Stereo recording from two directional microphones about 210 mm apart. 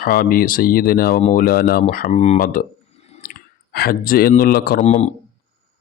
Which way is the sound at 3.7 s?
45° left (ahead or behind).